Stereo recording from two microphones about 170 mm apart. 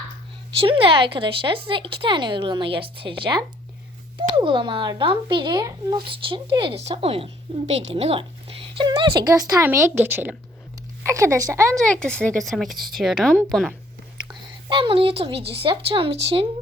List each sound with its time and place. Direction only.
0.5 s a woman's voice: 30° right (ahead or behind)
11.9 s speech: 5° left (ahead or behind)
14.3 s a woman's voice: 30° right (ahead or behind)